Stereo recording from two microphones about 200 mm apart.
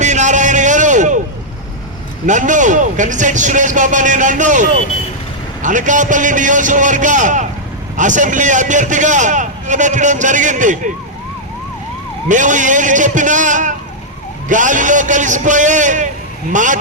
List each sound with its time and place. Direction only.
0.0 s a sound: 35° right (ahead or behind)
2.2 s a man's voice: 40° right (ahead or behind)
12.3 s a man's voice: 40° right (ahead or behind)